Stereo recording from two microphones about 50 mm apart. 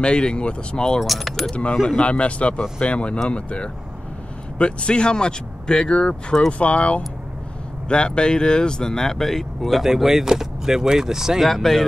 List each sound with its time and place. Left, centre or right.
0.0 s speech: centre
1.0 s speech: centre
1.5 s speech: left; by 11.4 s centre
11.4 s speech: centre